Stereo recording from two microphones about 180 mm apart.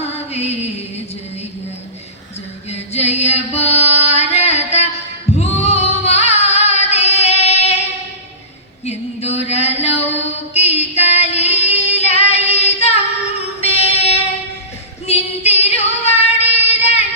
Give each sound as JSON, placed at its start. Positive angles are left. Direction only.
{"t": 0.0, "sound": "music", "side_deg": 35}
{"t": 2.6, "sound": "singing", "side_deg": 35}
{"t": 8.8, "sound": "a sound", "side_deg": 35}
{"t": 10.1, "sound": "music", "side_deg": 35}
{"t": 13.6, "sound": "child singing", "side_deg": 35}
{"t": 15.0, "sound": "female singing", "side_deg": 35}